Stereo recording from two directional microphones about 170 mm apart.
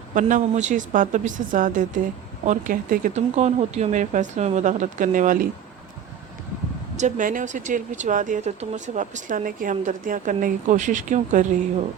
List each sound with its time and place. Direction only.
0.1 s speech: 50° right (ahead or behind)
6.9 s speech: 45° right (ahead or behind)